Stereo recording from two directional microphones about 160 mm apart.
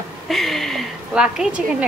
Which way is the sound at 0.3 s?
Centre (ahead or behind).